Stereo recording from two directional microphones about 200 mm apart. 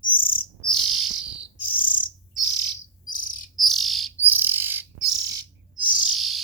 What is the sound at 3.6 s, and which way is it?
Bird, centre (ahead or behind).